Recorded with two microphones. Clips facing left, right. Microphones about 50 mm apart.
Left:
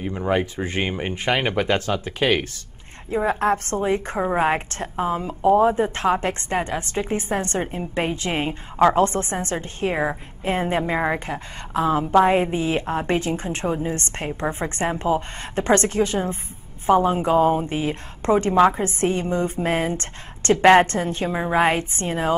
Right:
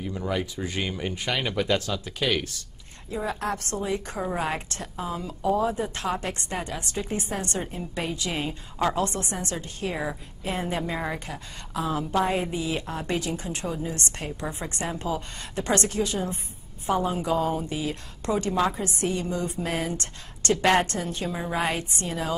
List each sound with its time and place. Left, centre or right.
0.0 s a woman's voice: left